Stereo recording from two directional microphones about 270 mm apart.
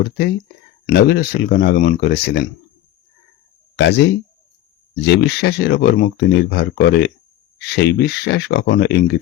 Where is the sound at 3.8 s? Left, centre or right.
Left.